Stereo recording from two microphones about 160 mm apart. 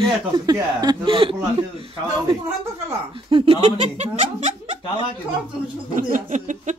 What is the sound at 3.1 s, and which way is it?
Speech, 35° right (ahead or behind).